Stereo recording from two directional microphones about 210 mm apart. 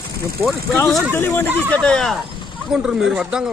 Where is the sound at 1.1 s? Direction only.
10° left (ahead or behind).